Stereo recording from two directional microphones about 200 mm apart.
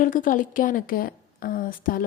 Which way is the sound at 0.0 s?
40° left (ahead or behind).